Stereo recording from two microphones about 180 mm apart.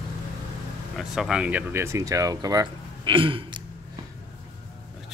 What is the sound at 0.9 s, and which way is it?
Speech, centre (ahead or behind).